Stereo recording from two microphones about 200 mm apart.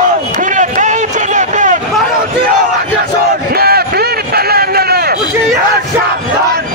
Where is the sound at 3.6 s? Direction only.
50° right (ahead or behind).